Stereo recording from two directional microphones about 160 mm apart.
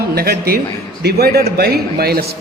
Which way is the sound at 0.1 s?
70° right (ahead or behind).